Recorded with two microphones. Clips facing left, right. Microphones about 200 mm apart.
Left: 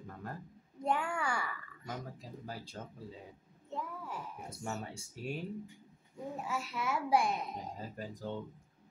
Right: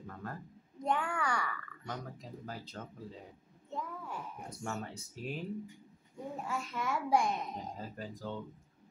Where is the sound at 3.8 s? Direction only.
5° left (ahead or behind).